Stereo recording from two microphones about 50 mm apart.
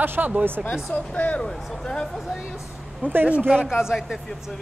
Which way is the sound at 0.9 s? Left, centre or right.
Left.